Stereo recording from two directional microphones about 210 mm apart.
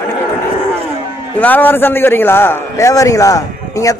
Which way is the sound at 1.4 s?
10° left (ahead or behind).